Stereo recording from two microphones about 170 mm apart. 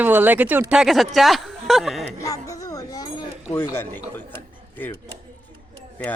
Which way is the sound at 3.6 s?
15° left (ahead or behind).